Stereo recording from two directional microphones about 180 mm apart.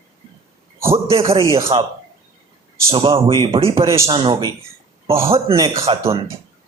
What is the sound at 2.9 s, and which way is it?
A man's voice, 30° right (ahead or behind).